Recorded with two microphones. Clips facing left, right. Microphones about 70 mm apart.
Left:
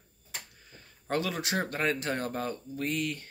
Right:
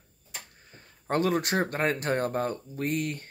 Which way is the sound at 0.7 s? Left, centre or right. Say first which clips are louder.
Right 4 dB; right.